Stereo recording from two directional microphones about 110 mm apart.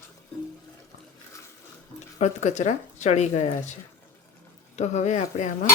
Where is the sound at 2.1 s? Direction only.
90° left.